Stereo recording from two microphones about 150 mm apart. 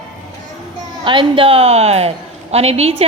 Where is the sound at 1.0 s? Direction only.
35° right (ahead or behind).